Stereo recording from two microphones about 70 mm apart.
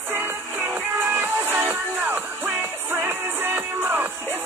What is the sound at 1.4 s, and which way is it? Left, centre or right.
Music, right.